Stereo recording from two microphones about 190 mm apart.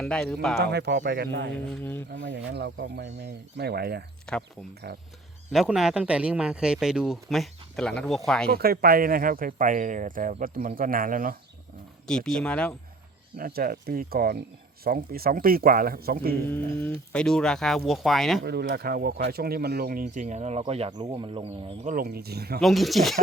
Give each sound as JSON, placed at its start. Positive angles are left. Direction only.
{"t": 0.0, "sound": "speech", "side_deg": 5}
{"t": 0.5, "sound": "speech", "side_deg": -60}
{"t": 1.7, "sound": "speech", "side_deg": 10}
{"t": 2.0, "sound": "speech", "side_deg": -70}
{"t": 4.3, "sound": "speech", "side_deg": 5}
{"t": 4.8, "sound": "speech", "side_deg": -55}
{"t": 5.5, "sound": "speech", "side_deg": 0}
{"t": 8.4, "sound": "speech", "side_deg": -55}
{"t": 12.0, "sound": "speech", "side_deg": 5}
{"t": 13.3, "sound": "speech", "side_deg": -50}
{"t": 16.5, "sound": "speech", "side_deg": 10}
{"t": 18.4, "sound": "speech", "side_deg": -60}
{"t": 21.8, "sound": "speech", "side_deg": -50}
{"t": 22.6, "sound": "speech", "side_deg": 0}